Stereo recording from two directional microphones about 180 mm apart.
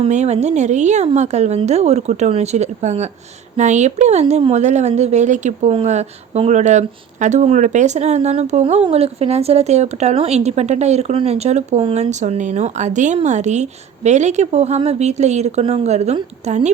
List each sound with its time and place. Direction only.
0.0 s speech: 40° right (ahead or behind)